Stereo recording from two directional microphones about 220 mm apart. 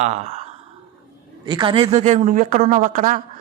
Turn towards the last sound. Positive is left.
turn(degrees=-35)  # may be behind; listen again after turning